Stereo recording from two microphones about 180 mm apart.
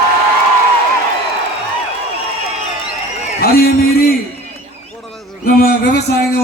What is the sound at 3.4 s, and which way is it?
Speech, 55° left (ahead or behind).